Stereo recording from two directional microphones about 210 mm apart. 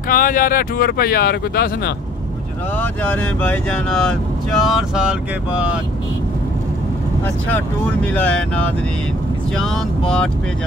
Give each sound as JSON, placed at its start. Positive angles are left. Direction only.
{"t": 0.1, "sound": "speech", "side_deg": 40}
{"t": 2.8, "sound": "speech", "side_deg": 5}
{"t": 7.4, "sound": "speech", "side_deg": 5}